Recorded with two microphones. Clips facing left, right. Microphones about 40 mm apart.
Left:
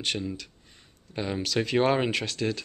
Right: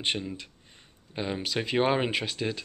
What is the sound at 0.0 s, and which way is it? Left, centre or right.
Speech, right.